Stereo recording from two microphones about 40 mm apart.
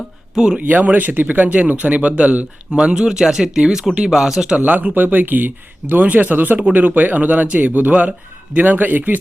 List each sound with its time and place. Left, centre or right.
0.3 s speech: centre
0.7 s speech: right
2.8 s speech: centre
4.5 s speech: right